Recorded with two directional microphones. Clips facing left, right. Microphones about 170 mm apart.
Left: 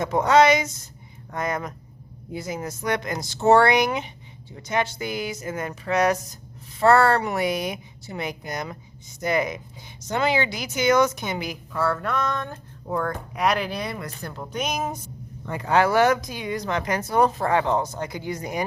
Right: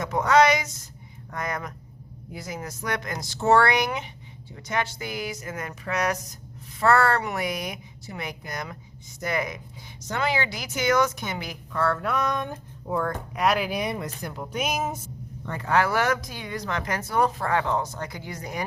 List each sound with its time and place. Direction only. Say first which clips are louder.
0.0 s speech: left 2 dB; 25° left (ahead or behind)
11.8 s speech: left 1 dB; 5° left (ahead or behind)
12.0 s speech: even; 10° right (ahead or behind)
12.9 s speech: left 1 dB; centre (ahead or behind); by 14.3 s 20° right (ahead or behind)
14.3 s speech: left 1 dB; 5° right (ahead or behind)
15.5 s speech: left 4 dB; 20° left (ahead or behind)